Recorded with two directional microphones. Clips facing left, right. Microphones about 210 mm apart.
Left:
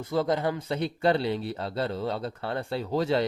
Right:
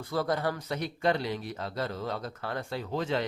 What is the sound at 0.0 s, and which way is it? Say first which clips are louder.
Speech: left 3 dB; 20° left (ahead or behind).